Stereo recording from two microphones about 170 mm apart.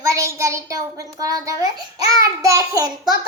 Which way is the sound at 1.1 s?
20° right (ahead or behind).